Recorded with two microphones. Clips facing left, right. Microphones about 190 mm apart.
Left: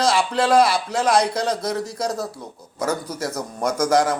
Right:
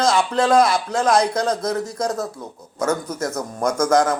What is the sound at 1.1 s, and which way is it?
Speech, 30° left (ahead or behind).